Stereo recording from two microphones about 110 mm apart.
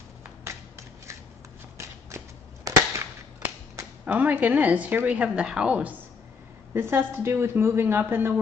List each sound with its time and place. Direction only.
0.4 s a sound: 25° right (ahead or behind)
4.0 s a woman's voice: 15° right (ahead or behind)
6.7 s speech: 20° right (ahead or behind)